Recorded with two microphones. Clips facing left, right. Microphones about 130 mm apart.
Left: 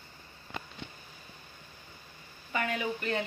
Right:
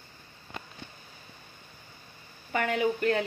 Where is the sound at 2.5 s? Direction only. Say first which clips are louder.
Right 5 dB; 65° right (ahead or behind).